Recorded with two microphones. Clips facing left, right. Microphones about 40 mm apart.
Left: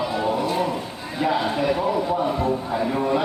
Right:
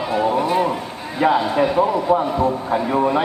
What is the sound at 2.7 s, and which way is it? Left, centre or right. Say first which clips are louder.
Speech: right 4 dB; right.